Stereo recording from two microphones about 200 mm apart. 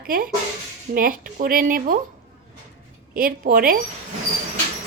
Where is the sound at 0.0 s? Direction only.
45° right (ahead or behind).